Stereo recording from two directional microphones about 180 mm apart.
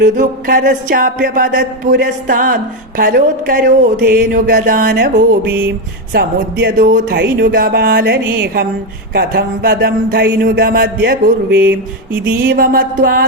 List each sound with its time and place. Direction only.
0.0 s a sound: 50° right (ahead or behind)
6.1 s speech: 60° right (ahead or behind)
12.2 s speech: 60° right (ahead or behind)